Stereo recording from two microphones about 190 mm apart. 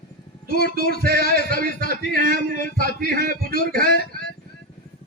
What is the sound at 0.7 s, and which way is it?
A man's voice, 50° right (ahead or behind).